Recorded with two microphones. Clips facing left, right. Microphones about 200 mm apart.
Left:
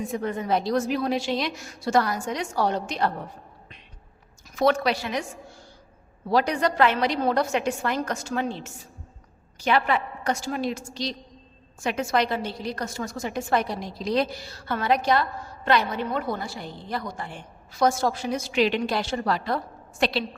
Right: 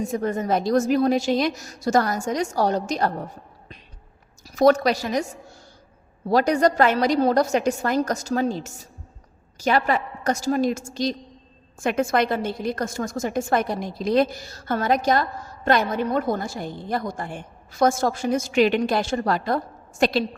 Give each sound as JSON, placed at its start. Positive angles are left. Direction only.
{"t": 0.1, "sound": "a woman's voice", "side_deg": -45}
{"t": 4.4, "sound": "a woman's voice", "side_deg": -40}